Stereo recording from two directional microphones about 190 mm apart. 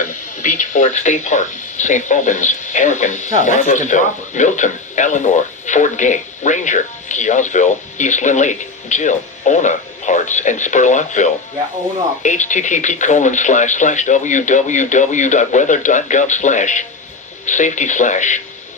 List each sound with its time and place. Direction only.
0.0 s speech: 40° left (ahead or behind)